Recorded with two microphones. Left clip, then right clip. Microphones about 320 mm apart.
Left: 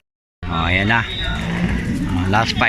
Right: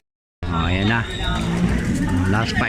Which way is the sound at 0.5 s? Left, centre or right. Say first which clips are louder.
Left 5 dB; centre.